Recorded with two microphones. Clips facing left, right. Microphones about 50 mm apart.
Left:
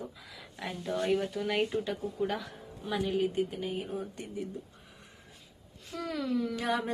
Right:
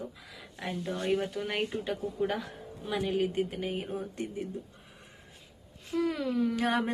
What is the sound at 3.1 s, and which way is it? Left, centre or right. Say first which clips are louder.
Speech: even; right.